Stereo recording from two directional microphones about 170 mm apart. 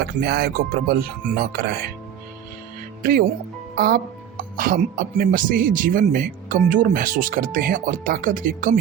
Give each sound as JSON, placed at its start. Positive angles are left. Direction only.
{"t": 0.0, "sound": "speech", "side_deg": -65}
{"t": 3.0, "sound": "a man's voice", "side_deg": -55}